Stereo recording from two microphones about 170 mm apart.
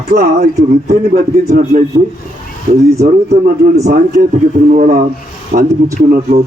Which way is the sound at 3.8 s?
50° right (ahead or behind).